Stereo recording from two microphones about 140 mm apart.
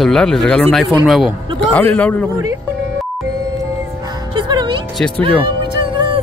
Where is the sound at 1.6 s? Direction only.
15° left (ahead or behind).